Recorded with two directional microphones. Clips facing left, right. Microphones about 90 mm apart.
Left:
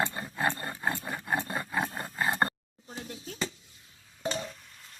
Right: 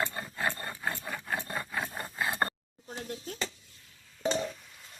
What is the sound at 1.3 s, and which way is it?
Filing, 20° left (ahead or behind).